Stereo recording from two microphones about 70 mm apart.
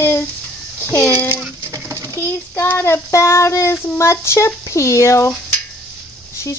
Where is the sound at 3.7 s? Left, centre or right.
Left.